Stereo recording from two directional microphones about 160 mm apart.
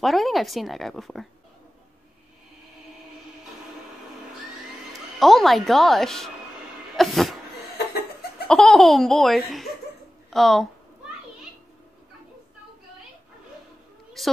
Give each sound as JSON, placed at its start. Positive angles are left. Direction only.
{"t": 0.0, "sound": "speech", "side_deg": 0}
{"t": 4.9, "sound": "speech", "side_deg": 0}
{"t": 7.7, "sound": "laughter", "side_deg": 90}
{"t": 8.5, "sound": "speech", "side_deg": 5}
{"t": 14.2, "sound": "a woman's voice", "side_deg": 0}